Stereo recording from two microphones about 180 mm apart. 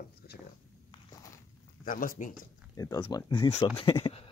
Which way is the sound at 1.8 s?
50° left (ahead or behind).